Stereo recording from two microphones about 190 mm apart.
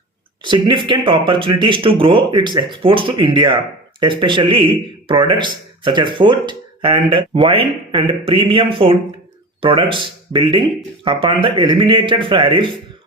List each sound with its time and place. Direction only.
0.4 s speech: 25° right (ahead or behind)